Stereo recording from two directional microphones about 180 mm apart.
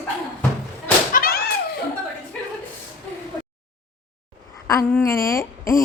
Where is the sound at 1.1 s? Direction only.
55° left (ahead or behind).